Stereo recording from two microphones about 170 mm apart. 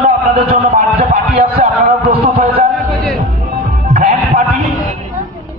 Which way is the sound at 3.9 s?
55° right (ahead or behind).